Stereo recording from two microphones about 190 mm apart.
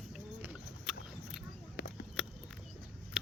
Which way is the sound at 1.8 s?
55° left (ahead or behind).